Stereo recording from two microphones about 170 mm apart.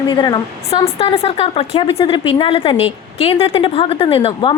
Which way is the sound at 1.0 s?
35° left (ahead or behind).